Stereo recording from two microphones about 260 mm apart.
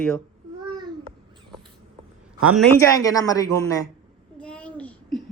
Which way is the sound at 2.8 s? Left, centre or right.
Centre.